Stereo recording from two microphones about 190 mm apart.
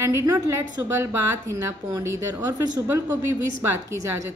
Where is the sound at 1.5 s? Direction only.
15° right (ahead or behind).